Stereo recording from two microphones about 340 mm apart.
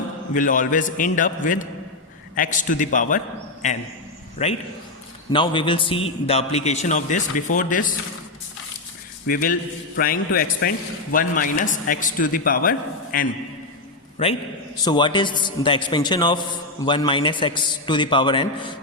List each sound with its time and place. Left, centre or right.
0.3 s a man's voice: left
4.4 s a man's voice: centre
9.2 s a man's voice: left
14.8 s a man's voice: centre